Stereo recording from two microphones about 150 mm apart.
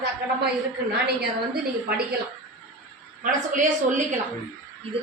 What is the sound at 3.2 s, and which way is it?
Speech, 60° right (ahead or behind).